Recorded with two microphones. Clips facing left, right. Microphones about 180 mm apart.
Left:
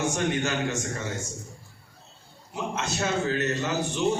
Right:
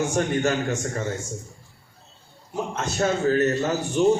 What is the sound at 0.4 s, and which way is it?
Speech, 45° right (ahead or behind).